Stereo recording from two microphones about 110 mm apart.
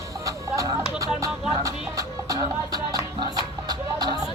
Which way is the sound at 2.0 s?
35° right (ahead or behind).